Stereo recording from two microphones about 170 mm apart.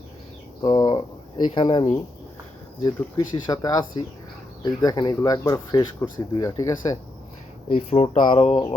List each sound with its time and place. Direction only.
0.6 s speech: 25° left (ahead or behind)
2.8 s speech: 25° left (ahead or behind)
7.7 s speech: 35° left (ahead or behind)